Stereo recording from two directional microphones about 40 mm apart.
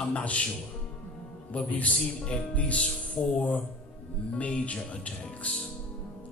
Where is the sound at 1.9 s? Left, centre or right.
Left.